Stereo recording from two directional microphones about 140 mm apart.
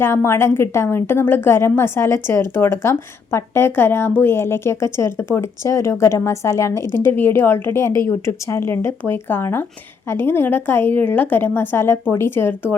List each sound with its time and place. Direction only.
0.0 s a woman's voice: 15° left (ahead or behind)